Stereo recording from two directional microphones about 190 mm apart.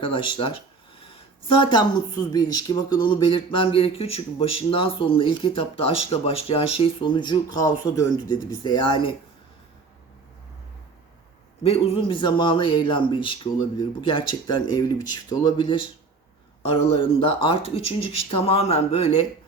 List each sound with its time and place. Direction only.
0.0 s speech: 25° left (ahead or behind)
11.6 s speech: 30° left (ahead or behind)